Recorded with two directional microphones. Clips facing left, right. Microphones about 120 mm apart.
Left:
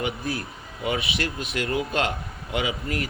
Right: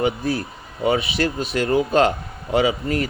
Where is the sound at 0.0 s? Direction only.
30° right (ahead or behind).